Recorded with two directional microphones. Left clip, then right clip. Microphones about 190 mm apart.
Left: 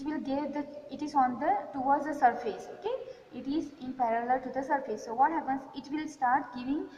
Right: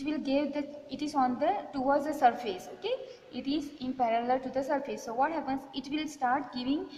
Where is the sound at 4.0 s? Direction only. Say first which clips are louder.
Even; 55° right (ahead or behind).